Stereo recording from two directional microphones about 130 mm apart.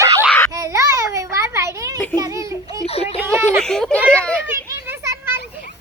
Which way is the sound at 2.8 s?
50° left (ahead or behind).